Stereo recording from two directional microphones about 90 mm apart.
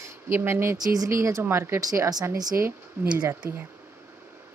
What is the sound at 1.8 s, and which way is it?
Speech, 40° right (ahead or behind).